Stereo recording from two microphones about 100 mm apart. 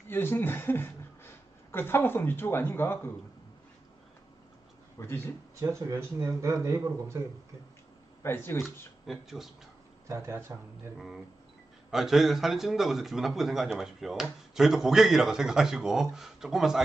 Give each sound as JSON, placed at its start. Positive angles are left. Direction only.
{"t": 0.1, "sound": "speech", "side_deg": 25}
{"t": 4.9, "sound": "speech", "side_deg": 25}
{"t": 5.6, "sound": "speech", "side_deg": -30}
{"t": 8.2, "sound": "speech", "side_deg": 25}
{"t": 9.0, "sound": "a man's voice", "side_deg": 0}
{"t": 10.0, "sound": "speech", "side_deg": -25}
{"t": 11.9, "sound": "a man's voice", "side_deg": 0}